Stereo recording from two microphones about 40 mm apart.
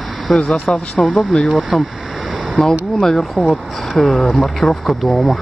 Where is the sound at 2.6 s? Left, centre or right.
Centre.